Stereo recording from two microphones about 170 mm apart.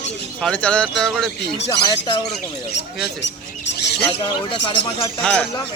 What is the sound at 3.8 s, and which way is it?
Speech, 85° left.